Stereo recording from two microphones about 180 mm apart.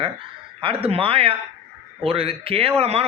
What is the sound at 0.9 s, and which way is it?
Speech, 30° right (ahead or behind).